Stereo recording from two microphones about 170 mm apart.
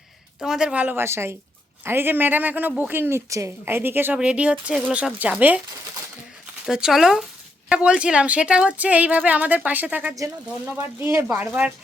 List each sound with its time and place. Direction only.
0.3 s a woman's voice: 5° right (ahead or behind)
6.7 s a woman's voice: 5° right (ahead or behind)